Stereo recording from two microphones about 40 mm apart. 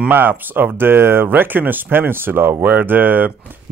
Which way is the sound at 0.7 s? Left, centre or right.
Right.